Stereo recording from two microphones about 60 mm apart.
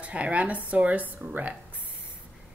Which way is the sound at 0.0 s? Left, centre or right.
Right.